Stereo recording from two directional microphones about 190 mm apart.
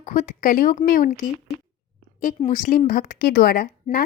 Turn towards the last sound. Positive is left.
turn(degrees=50)  # may be behind; listen again after turning